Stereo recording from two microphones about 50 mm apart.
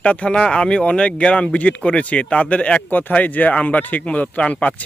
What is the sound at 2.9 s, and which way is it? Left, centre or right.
Speech, left.